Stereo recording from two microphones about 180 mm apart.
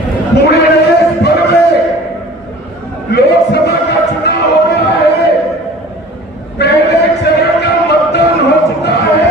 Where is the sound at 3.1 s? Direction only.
65° left (ahead or behind).